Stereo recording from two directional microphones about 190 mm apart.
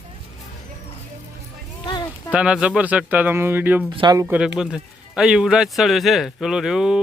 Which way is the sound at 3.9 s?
20° right (ahead or behind).